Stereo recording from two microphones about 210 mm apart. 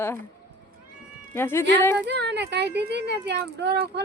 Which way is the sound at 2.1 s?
55° right (ahead or behind).